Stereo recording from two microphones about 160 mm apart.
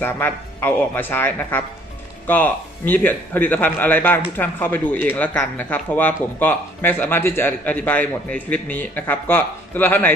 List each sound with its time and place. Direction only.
0.0 s a man's voice: 10° left (ahead or behind)